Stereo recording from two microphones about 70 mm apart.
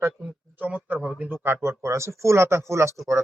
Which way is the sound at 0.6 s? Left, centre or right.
Right.